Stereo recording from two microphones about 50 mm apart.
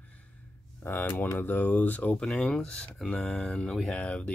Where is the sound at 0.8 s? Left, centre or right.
Left.